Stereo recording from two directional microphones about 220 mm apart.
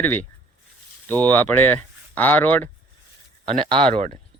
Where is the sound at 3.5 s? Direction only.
25° right (ahead or behind).